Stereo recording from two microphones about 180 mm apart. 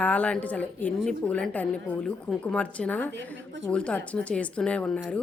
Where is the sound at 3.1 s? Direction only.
90° right.